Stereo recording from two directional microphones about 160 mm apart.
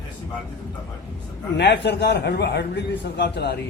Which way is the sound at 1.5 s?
90° left.